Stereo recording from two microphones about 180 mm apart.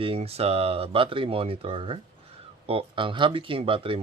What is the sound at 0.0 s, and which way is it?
Speech, 30° right (ahead or behind).